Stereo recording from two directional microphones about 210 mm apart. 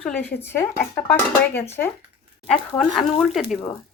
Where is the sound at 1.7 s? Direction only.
10° left (ahead or behind).